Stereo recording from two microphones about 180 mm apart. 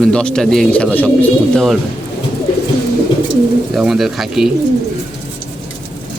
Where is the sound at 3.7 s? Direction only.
Centre (ahead or behind).